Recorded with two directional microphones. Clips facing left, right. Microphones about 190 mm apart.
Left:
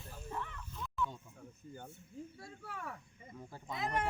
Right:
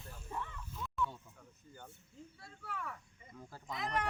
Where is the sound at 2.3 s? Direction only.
45° left (ahead or behind).